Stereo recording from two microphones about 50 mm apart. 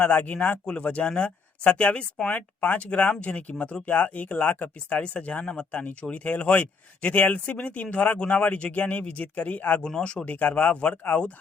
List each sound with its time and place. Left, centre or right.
0.0 s speech: left
0.6 s speech: left
10.0 s speech: left
10.9 s speech: left